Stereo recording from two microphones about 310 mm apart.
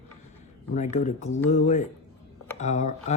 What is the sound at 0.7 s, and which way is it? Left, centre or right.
Speech, left.